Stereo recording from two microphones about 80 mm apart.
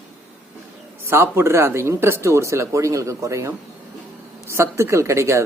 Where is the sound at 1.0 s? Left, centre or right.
Right.